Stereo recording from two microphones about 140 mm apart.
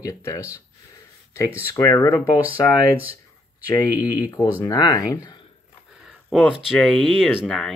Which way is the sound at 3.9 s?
25° left (ahead or behind).